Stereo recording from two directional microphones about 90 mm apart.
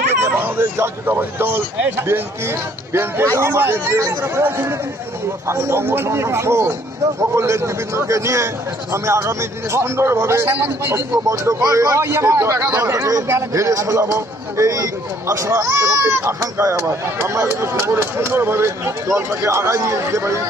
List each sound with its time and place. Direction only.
0.2 s a man's voice: 25° right (ahead or behind)
11.2 s speech: 35° right (ahead or behind)